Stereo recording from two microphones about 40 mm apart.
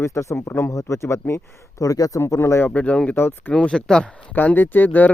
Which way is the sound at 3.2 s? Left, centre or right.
Left.